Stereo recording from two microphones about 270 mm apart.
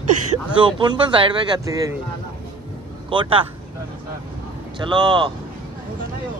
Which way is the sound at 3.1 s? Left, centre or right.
Centre.